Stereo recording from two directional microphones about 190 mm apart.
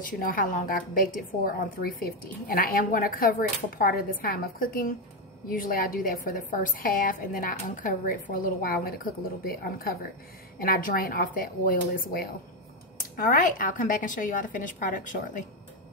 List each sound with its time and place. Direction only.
0.0 s a woman's voice: 45° left (ahead or behind)